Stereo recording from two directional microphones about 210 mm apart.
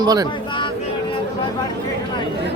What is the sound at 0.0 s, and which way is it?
Speech, 20° right (ahead or behind).